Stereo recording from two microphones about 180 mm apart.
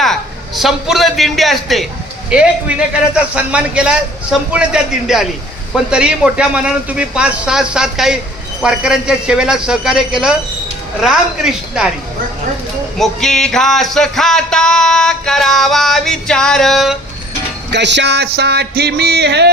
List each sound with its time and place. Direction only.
0.0 s a man's voice: centre (ahead or behind)
2.3 s music: 5° right (ahead or behind)
13.0 s music: centre (ahead or behind)
17.7 s music: 75° right (ahead or behind)